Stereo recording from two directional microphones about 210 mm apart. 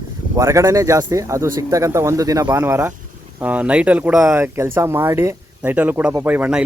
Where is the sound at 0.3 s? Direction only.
15° right (ahead or behind).